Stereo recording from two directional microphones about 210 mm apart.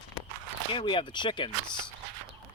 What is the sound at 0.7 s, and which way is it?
Speech, 25° left (ahead or behind).